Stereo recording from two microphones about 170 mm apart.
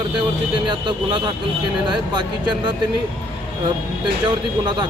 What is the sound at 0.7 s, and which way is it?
Speech, 30° right (ahead or behind).